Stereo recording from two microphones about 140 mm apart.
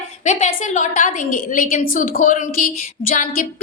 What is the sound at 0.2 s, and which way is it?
A woman's voice, 55° left (ahead or behind).